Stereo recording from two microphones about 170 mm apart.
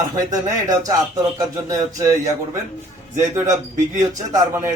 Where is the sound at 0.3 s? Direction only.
20° right (ahead or behind).